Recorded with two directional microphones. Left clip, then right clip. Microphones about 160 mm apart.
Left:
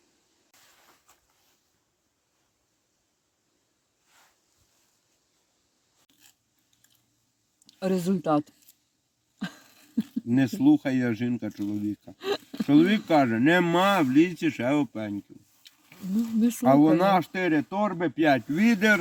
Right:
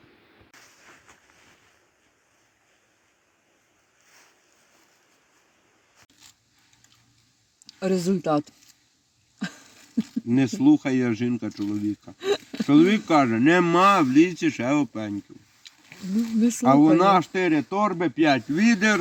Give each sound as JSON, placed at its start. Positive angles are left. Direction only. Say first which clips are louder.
{"t": 7.7, "sound": "speech", "louder": "right 3 dB", "side_deg": -5}
{"t": 9.4, "sound": "dog", "louder": "right 3 dB", "side_deg": -5}
{"t": 10.0, "sound": "speech", "louder": "right 2 dB", "side_deg": 15}
{"t": 12.2, "sound": "a sound", "louder": "right 5 dB", "side_deg": -5}
{"t": 12.6, "sound": "speech", "louder": "right 3 dB", "side_deg": 15}
{"t": 16.6, "sound": "speech", "louder": "right 3 dB", "side_deg": 15}